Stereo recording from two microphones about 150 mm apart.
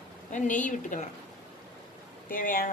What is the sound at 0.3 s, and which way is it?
Speech, 55° left (ahead or behind).